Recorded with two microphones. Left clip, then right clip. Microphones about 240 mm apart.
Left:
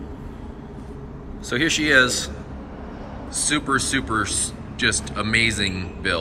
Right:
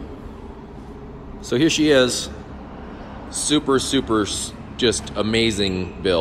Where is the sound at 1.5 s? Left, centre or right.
Centre.